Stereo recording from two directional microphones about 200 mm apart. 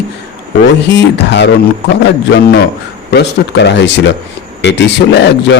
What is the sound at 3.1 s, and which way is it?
A man's voice, 60° left (ahead or behind).